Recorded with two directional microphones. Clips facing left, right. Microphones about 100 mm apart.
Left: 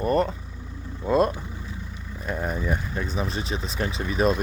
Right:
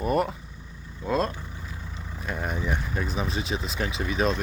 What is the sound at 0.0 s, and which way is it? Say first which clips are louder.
Speech: left 2 dB; 5° right (ahead or behind).